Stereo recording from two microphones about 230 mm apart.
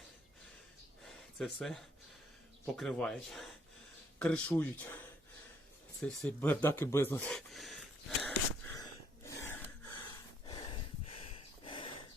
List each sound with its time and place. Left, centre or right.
1.0 s a sound: centre
2.7 s speech: centre
8.2 s gasp: centre
10.4 s snort: left